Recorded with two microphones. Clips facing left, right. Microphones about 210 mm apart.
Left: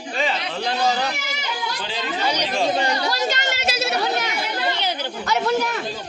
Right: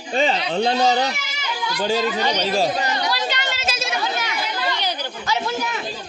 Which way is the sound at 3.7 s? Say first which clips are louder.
Left 3 dB; 65° left (ahead or behind).